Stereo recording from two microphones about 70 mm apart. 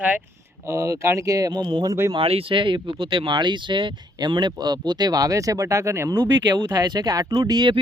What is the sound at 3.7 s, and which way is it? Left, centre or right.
Speech, right.